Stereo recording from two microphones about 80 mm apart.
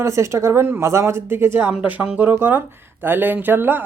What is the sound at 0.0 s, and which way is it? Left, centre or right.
Speech, right.